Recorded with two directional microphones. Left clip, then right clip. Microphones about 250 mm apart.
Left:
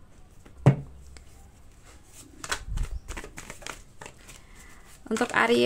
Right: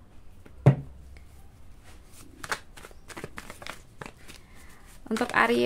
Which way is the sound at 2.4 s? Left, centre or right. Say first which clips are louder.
Even; centre.